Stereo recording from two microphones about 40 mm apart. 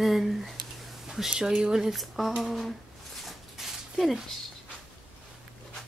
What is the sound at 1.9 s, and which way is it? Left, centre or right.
Speech, centre.